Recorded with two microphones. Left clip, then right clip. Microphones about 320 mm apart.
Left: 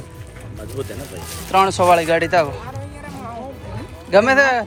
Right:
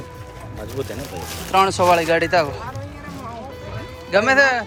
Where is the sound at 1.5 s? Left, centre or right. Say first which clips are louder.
Left 2 dB; centre.